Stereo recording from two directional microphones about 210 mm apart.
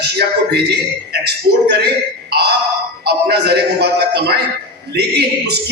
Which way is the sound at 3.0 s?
50° right (ahead or behind).